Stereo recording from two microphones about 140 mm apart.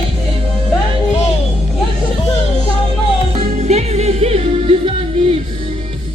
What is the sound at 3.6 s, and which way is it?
Music, 50° right (ahead or behind).